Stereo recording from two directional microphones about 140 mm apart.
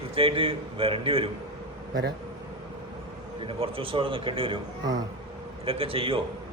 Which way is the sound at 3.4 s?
40° right (ahead or behind).